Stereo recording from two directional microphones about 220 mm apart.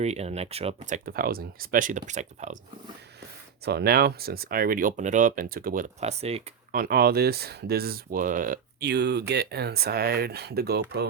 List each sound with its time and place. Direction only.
0.0 s speech: 30° right (ahead or behind)
3.7 s speech: 45° right (ahead or behind); by 6.7 s 30° right (ahead or behind)
6.7 s speech: 45° right (ahead or behind)